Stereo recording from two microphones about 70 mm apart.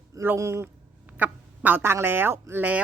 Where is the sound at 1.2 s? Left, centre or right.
Right.